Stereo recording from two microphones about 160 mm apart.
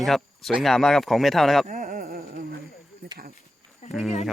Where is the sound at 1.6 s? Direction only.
60° right (ahead or behind).